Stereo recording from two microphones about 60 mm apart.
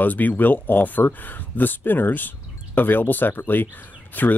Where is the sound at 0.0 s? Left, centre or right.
Left.